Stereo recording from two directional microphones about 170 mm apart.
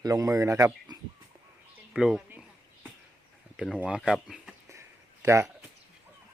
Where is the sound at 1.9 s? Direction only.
Centre (ahead or behind).